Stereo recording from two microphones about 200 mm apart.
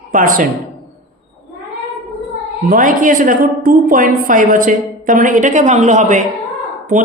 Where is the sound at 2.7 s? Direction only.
40° right (ahead or behind).